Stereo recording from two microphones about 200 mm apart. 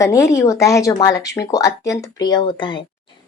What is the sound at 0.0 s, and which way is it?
Speech, 15° left (ahead or behind).